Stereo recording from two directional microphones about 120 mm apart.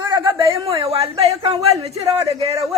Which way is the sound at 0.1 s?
45° right (ahead or behind).